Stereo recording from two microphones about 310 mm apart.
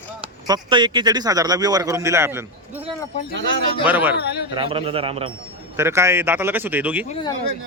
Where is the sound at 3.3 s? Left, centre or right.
Right.